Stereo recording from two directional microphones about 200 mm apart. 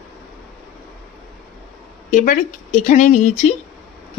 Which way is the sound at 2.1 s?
40° left (ahead or behind).